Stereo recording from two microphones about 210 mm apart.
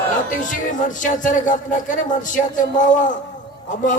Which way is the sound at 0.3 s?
35° left (ahead or behind).